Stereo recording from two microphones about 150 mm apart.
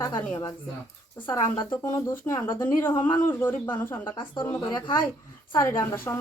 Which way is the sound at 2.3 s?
20° left (ahead or behind).